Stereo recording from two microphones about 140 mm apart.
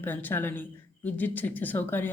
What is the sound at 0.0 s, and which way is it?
A woman's voice, 15° left (ahead or behind).